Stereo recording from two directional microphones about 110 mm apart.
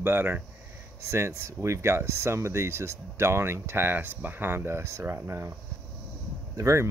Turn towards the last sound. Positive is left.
turn(degrees=-25)  # may be behind; listen again after turning